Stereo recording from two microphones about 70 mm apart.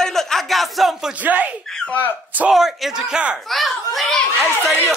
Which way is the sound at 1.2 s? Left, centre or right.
Right.